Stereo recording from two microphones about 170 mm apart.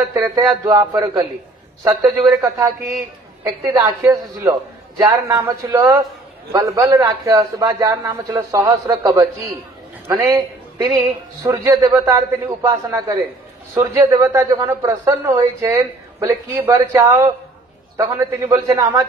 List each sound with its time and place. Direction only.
0.1 s a man's voice: 20° right (ahead or behind)